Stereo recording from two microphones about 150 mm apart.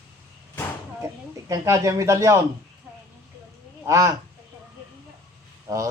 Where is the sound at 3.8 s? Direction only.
20° right (ahead or behind).